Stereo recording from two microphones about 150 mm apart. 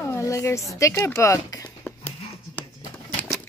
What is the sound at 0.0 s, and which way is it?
Speech, 20° left (ahead or behind).